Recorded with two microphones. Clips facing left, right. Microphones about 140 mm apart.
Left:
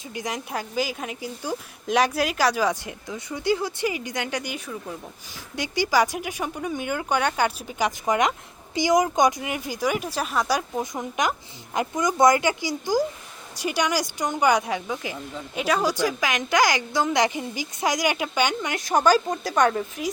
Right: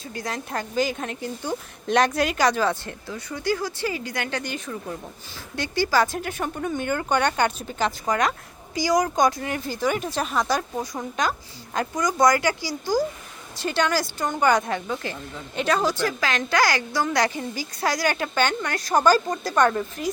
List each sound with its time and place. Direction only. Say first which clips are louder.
0.1 s a woman's voice: even; 15° left (ahead or behind)
19.5 s speech: right 1 dB; centre (ahead or behind)